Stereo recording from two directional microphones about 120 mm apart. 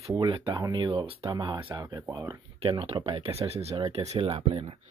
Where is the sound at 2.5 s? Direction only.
50° right (ahead or behind).